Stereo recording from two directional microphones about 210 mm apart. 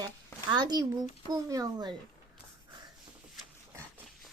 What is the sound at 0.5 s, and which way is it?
A child's voice, 20° right (ahead or behind).